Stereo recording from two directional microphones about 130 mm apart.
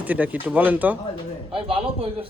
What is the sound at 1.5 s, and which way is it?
Speech, 45° right (ahead or behind).